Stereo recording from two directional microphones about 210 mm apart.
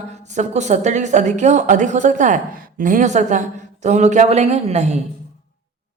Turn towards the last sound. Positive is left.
turn(degrees=-30)  # may be behind; listen again after turning